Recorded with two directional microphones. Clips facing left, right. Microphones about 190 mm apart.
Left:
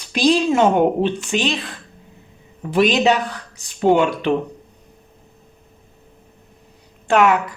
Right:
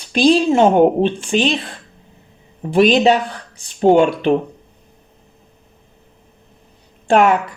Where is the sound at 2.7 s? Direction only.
30° right (ahead or behind).